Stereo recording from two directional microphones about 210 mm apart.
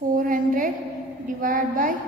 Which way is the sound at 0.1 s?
40° right (ahead or behind).